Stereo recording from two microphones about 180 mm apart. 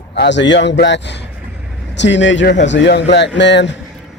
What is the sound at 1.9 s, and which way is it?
A man's voice, 85° left.